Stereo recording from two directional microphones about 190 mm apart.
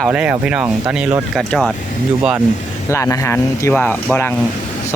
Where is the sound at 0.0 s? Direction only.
5° right (ahead or behind).